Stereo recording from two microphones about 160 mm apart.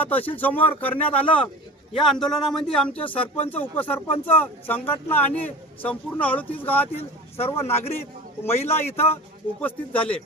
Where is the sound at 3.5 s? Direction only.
10° left (ahead or behind).